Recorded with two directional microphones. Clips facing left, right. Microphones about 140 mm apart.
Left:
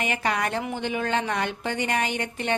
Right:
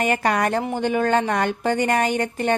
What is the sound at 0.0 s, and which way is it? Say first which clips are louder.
Speech: right 6 dB; 45° right (ahead or behind).